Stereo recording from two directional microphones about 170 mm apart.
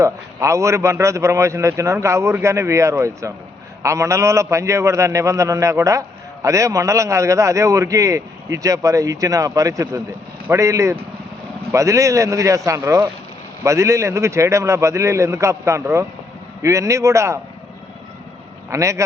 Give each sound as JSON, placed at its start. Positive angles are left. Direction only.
{"t": 0.0, "sound": "a man's voice", "side_deg": -15}
{"t": 18.7, "sound": "a man's voice", "side_deg": -20}